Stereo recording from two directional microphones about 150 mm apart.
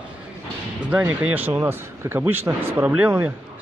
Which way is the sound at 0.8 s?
10° right (ahead or behind).